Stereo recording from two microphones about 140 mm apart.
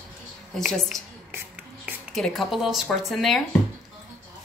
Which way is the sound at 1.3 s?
15° right (ahead or behind).